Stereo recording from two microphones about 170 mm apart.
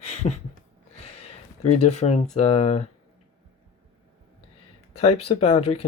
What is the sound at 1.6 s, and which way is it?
Speech, 40° left (ahead or behind).